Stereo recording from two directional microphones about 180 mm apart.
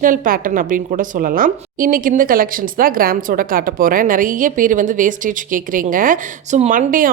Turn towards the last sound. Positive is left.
turn(degrees=-50)  # may be behind; listen again after turning